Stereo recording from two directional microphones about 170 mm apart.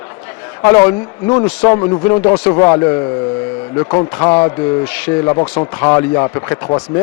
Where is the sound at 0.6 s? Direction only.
15° left (ahead or behind).